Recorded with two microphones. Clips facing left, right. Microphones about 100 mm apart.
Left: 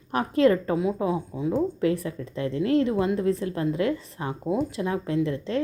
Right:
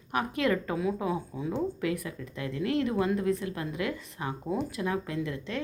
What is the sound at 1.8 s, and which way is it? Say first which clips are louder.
A woman's voice: left 7 dB; 30° left (ahead or behind).